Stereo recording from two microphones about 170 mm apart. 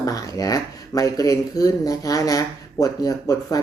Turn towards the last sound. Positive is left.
turn(degrees=20)  # may be behind; listen again after turning